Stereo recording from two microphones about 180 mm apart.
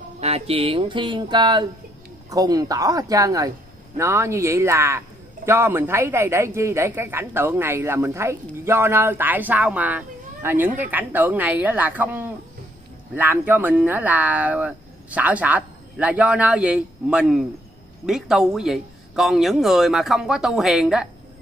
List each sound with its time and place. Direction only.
0.2 s a man's voice: 35° right (ahead or behind); by 21.1 s 5° right (ahead or behind)